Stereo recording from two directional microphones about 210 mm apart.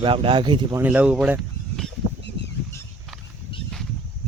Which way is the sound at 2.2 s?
55° left (ahead or behind).